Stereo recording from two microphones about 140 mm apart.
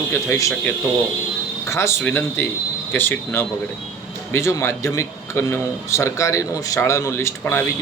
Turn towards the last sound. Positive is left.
turn(degrees=15)  # may be behind; listen again after turning